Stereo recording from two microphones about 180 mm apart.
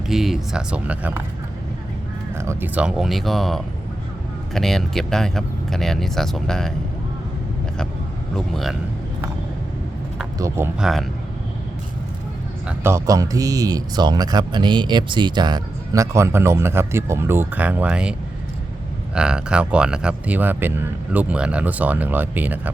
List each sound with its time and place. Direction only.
0.1 s speech: centre (ahead or behind)
2.4 s speech: 15° right (ahead or behind); by 6.7 s 5° left (ahead or behind)
10.3 s speech: 15° right (ahead or behind)
12.6 s speech: 15° right (ahead or behind)
19.1 s speech: 5° right (ahead or behind)